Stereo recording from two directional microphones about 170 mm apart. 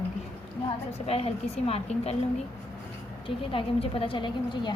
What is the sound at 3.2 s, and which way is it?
A woman's voice, 30° left (ahead or behind).